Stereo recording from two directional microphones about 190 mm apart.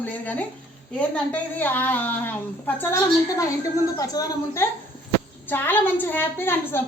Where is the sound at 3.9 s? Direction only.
15° left (ahead or behind).